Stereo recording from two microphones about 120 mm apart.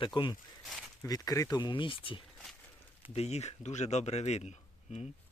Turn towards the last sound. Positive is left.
turn(degrees=65)  # may be behind; listen again after turning